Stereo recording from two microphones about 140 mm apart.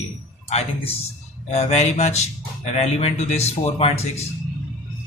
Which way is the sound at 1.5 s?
50° left (ahead or behind).